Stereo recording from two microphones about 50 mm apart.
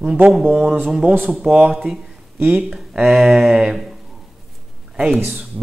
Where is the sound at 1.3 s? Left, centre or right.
Centre.